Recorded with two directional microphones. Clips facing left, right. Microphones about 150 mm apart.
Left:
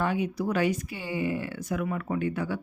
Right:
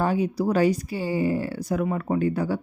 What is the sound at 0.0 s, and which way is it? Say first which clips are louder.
Speech: right 4 dB; 35° right (ahead or behind).